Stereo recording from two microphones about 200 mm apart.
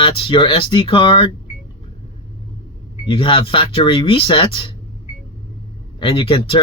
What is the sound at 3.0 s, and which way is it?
Speech, 25° left (ahead or behind).